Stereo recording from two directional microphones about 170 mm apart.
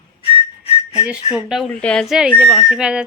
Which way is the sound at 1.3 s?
Centre (ahead or behind).